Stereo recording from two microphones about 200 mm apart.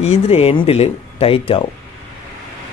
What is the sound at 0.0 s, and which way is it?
Speech, 30° left (ahead or behind).